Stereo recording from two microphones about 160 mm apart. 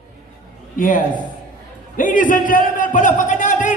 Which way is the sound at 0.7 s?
55° left (ahead or behind).